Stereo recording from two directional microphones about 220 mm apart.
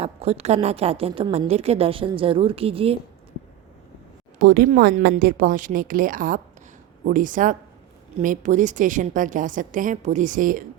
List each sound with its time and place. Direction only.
0.0 s a woman's voice: 25° right (ahead or behind)
4.4 s a woman's voice: 40° right (ahead or behind)